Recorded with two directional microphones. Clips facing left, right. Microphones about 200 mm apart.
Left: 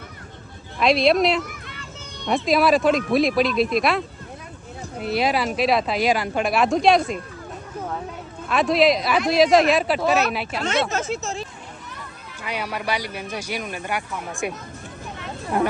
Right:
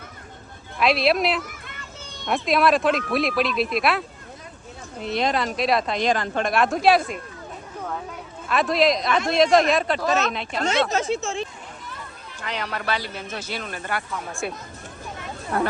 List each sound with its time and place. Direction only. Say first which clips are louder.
0.8 s speech: left 3 dB; centre (ahead or behind)
8.4 s speech: left 2 dB; centre (ahead or behind)
11.1 s speech: right 2 dB; 40° left (ahead or behind)
12.4 s speech: left 1 dB; 10° left (ahead or behind)